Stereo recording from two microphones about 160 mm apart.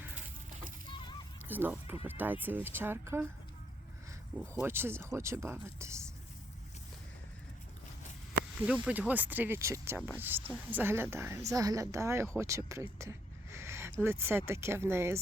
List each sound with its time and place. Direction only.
1.5 s speech: 10° right (ahead or behind)
4.6 s speech: 15° right (ahead or behind)
8.8 s speech: 10° right (ahead or behind)